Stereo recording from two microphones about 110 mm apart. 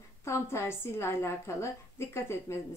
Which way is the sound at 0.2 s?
25° left (ahead or behind).